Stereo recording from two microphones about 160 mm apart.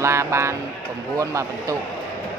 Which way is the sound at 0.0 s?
15° right (ahead or behind).